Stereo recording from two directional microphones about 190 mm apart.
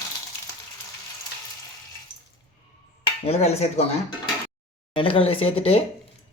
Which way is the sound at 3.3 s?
35° left (ahead or behind).